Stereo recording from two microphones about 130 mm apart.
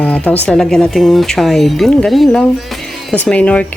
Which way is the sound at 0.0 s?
10° left (ahead or behind).